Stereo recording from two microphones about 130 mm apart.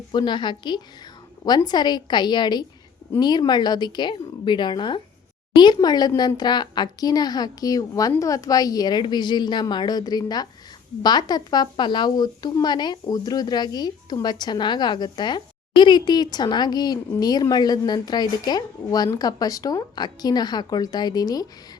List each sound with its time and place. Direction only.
0.1 s a woman's voice: 35° left (ahead or behind)